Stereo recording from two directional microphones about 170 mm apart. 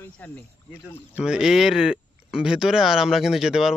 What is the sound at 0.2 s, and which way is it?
Speech, 10° left (ahead or behind).